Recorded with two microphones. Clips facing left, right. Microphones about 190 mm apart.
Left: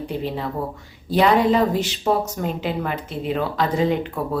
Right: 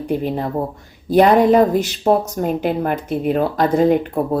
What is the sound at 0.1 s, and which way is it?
Speech, 50° right (ahead or behind).